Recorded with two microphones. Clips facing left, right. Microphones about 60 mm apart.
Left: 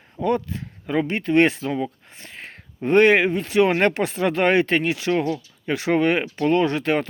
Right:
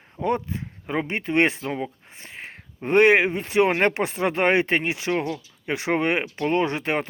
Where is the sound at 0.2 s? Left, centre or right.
Right.